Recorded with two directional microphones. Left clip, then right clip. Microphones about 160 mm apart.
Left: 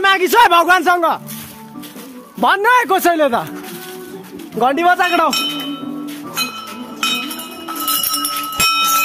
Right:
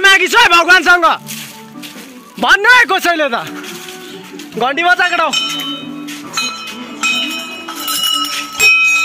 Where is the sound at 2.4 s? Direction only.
15° left (ahead or behind).